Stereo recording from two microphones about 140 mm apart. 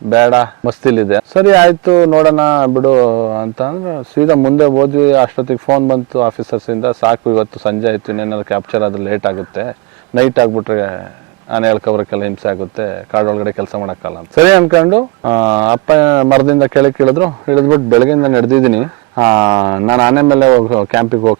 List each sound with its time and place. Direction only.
0.1 s speech: 20° right (ahead or behind)
1.9 s a man's voice: 35° right (ahead or behind)
5.0 s speech: 25° right (ahead or behind)
10.3 s a man's voice: 30° right (ahead or behind)
17.1 s a man's voice: 35° right (ahead or behind)